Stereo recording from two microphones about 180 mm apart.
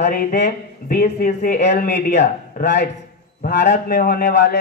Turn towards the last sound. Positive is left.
turn(degrees=65)  # may be behind; listen again after turning